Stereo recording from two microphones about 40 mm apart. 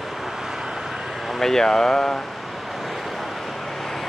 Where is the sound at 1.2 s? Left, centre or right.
Centre.